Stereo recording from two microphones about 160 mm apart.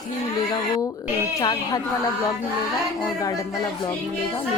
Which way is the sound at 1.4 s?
25° left (ahead or behind).